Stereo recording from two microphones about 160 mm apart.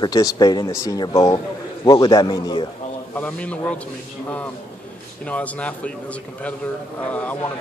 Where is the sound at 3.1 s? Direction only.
10° left (ahead or behind).